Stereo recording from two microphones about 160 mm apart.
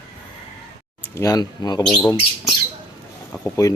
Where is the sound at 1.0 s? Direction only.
20° left (ahead or behind).